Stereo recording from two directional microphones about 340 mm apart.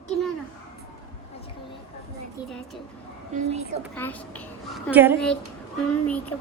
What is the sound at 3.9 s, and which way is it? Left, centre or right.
Speech, centre.